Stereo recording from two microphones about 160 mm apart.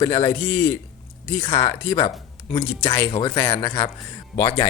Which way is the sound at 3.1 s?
25° left (ahead or behind).